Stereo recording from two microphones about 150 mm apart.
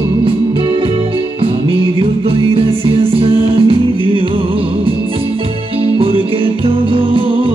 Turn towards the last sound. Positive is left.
turn(degrees=-35)  # may be behind; listen again after turning